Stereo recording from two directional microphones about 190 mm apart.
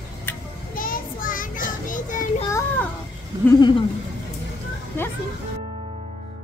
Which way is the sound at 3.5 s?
25° left (ahead or behind).